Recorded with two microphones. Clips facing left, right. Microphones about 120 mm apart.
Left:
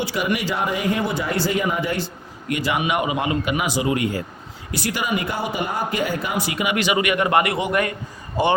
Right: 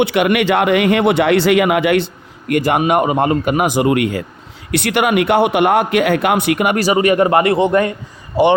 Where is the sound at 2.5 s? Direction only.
50° right (ahead or behind).